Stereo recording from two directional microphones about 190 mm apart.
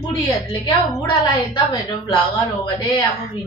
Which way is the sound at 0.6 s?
25° left (ahead or behind).